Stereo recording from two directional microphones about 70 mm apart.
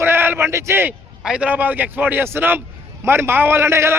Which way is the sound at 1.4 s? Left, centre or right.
Right.